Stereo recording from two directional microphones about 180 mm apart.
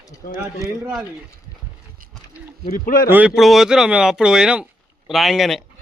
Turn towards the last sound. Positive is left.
turn(degrees=0)  # may be behind; listen again after turning